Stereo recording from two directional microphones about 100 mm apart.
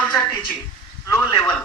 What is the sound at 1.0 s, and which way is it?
Speech, 30° left (ahead or behind).